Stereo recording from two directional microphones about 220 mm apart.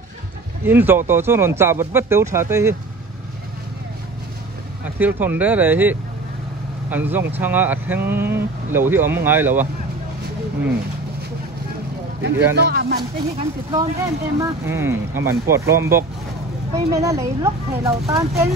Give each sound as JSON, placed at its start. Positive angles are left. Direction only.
{"t": 0.7, "sound": "speech", "side_deg": -10}
{"t": 4.9, "sound": "speech", "side_deg": -10}
{"t": 12.2, "sound": "speech", "side_deg": -50}
{"t": 13.4, "sound": "speech", "side_deg": -15}